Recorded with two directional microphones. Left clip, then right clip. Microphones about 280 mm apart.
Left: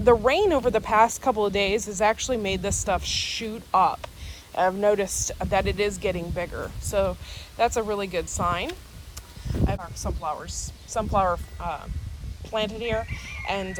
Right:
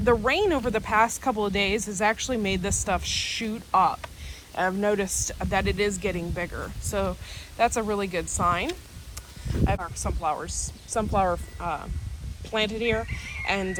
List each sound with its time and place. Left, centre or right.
0.0 s speech: left